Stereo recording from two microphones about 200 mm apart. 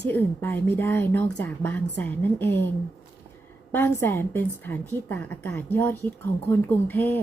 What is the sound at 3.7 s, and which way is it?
A woman's voice, 10° left (ahead or behind).